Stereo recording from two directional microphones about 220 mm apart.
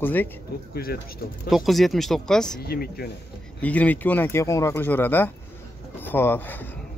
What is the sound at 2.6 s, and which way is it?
Speech, 45° left (ahead or behind).